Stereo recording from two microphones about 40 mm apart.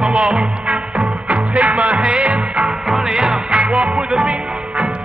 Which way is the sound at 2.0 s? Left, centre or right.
Right.